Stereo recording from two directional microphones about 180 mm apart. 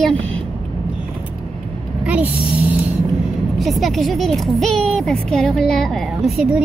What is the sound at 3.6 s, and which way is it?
Speech, centre (ahead or behind).